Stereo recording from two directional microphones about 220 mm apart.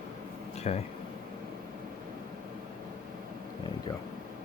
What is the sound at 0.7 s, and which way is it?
Speech, 30° left (ahead or behind).